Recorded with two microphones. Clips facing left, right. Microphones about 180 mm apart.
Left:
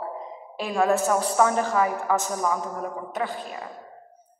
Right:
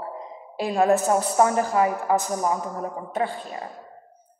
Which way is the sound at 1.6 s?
35° right (ahead or behind).